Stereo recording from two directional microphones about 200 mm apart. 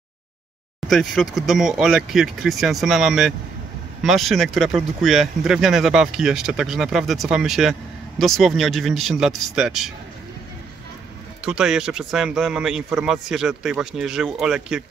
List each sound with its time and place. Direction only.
0.8 s speech: centre (ahead or behind)
11.4 s speech: 5° right (ahead or behind)